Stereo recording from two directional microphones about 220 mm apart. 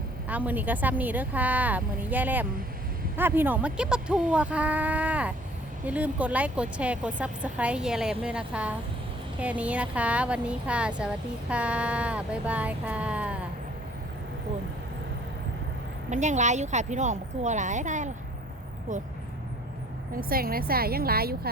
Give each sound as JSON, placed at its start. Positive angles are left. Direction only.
{"t": 0.3, "sound": "speech", "side_deg": -5}
{"t": 16.0, "sound": "speech", "side_deg": -30}
{"t": 20.1, "sound": "a woman's voice", "side_deg": -40}